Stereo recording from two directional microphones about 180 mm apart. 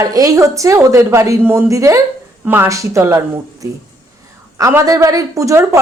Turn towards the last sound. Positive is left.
turn(degrees=-20)  # may be behind; listen again after turning